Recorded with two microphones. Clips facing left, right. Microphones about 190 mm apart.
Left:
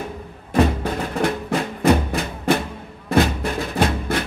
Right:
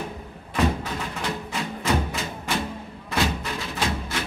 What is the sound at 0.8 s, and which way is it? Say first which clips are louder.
Music: left 8 dB; 55° left (ahead or behind).